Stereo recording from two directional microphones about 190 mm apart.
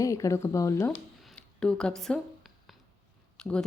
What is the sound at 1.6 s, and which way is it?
Speech, 5° left (ahead or behind).